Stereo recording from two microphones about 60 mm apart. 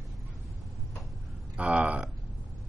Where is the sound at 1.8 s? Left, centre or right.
Right.